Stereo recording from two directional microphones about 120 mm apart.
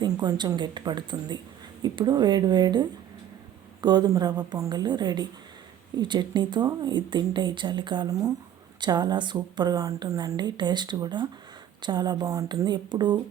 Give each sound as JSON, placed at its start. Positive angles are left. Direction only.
{"t": 0.0, "sound": "a woman's voice", "side_deg": -35}